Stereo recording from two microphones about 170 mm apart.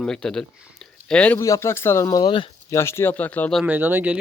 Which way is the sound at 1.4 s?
20° left (ahead or behind).